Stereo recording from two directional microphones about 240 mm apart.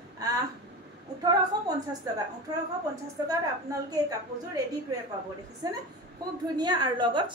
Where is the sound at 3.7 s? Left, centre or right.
Centre.